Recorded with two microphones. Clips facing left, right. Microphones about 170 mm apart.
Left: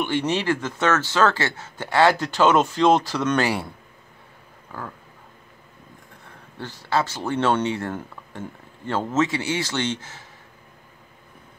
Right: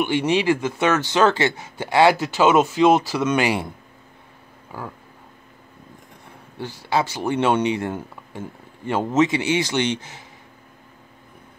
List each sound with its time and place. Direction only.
0.0 s speech: 10° right (ahead or behind)
4.7 s speech: 10° right (ahead or behind)
6.6 s speech: 10° right (ahead or behind)